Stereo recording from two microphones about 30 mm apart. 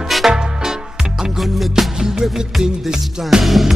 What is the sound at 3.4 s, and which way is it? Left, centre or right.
Music, centre.